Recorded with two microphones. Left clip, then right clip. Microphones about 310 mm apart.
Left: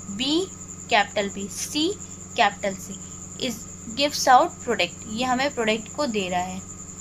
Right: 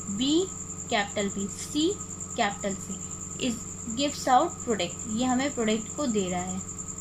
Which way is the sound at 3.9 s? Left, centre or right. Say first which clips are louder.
Left 6 dB; left.